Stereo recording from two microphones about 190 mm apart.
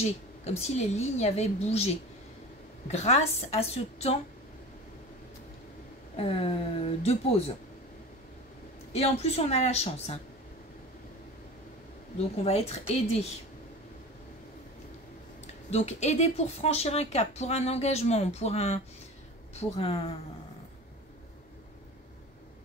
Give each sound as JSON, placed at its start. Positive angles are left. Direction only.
{"t": 0.6, "sound": "speech", "side_deg": 35}
{"t": 6.1, "sound": "speech", "side_deg": 30}
{"t": 8.9, "sound": "speech", "side_deg": 35}
{"t": 12.4, "sound": "speech", "side_deg": 35}
{"t": 15.7, "sound": "speech", "side_deg": 35}